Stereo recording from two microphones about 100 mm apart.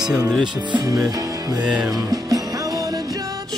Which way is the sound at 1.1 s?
35° right (ahead or behind).